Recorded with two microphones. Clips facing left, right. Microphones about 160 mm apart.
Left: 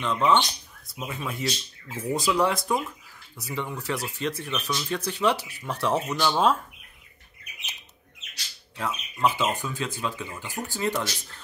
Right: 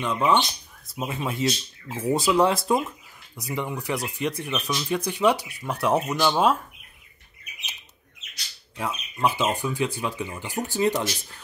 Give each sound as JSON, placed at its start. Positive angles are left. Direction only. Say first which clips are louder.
{"t": 0.0, "sound": "speech", "louder": "even", "side_deg": -15}
{"t": 0.9, "sound": "speech", "louder": "right 4 dB", "side_deg": -30}
{"t": 8.7, "sound": "speech", "louder": "right 1 dB", "side_deg": -15}